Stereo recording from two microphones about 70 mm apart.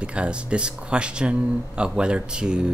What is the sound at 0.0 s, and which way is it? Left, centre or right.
Speech, centre.